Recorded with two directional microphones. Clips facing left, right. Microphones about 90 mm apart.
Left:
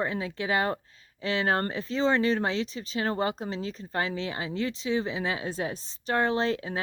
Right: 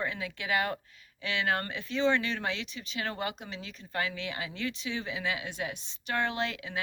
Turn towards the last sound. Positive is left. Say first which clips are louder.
# left 7 dB
turn(degrees=35)  # may be behind; listen again after turning